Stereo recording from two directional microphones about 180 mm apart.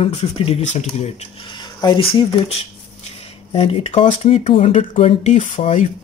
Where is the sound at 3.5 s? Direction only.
30° left (ahead or behind).